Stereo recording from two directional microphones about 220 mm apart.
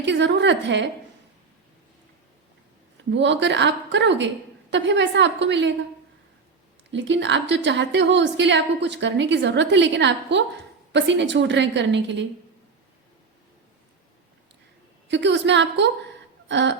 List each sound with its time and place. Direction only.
0.0 s a woman's voice: 55° right (ahead or behind)
3.1 s a woman's voice: 55° right (ahead or behind)
6.9 s a woman's voice: 55° right (ahead or behind)
15.0 s a woman's voice: 55° right (ahead or behind)